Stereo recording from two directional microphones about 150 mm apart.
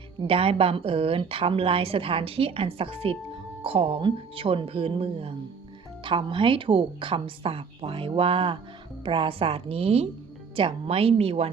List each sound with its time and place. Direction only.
0.2 s a woman's voice: 40° right (ahead or behind)